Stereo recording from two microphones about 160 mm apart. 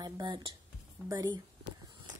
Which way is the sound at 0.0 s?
30° right (ahead or behind).